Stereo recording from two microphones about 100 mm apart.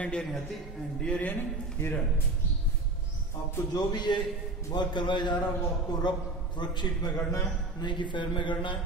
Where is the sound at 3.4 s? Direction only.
40° left (ahead or behind).